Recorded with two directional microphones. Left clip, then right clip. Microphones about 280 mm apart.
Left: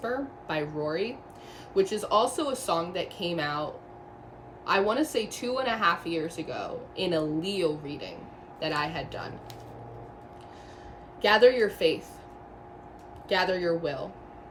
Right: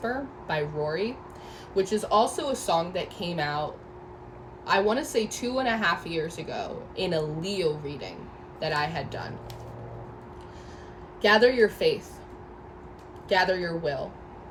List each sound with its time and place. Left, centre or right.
0.0 s a woman's voice: centre
11.2 s a woman's voice: centre
13.2 s a woman's voice: centre